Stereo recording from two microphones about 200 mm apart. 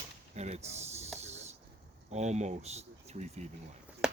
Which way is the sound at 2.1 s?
35° right (ahead or behind).